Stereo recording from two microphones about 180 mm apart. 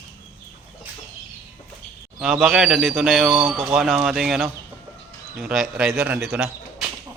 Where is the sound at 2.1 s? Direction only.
Centre (ahead or behind).